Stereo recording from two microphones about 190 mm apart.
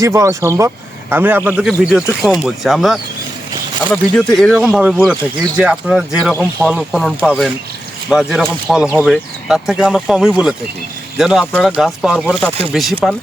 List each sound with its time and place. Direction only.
0.0 s speech: 15° right (ahead or behind)